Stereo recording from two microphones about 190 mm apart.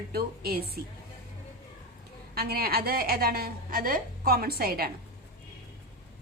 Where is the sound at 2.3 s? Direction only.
55° right (ahead or behind).